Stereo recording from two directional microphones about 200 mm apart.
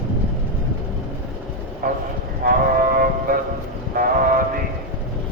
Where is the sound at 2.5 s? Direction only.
45° right (ahead or behind).